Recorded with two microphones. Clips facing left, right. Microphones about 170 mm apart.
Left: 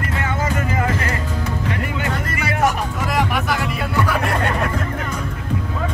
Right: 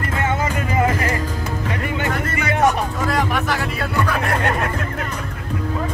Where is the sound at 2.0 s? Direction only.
25° right (ahead or behind).